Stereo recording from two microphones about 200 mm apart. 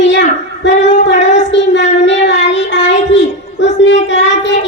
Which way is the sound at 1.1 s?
35° left (ahead or behind).